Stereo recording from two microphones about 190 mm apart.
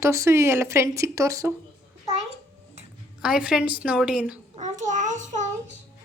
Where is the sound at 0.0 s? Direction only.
15° right (ahead or behind).